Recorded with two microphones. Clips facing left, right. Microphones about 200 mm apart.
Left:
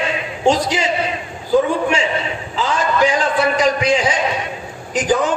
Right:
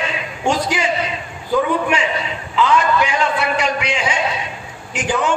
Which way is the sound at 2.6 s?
35° left (ahead or behind).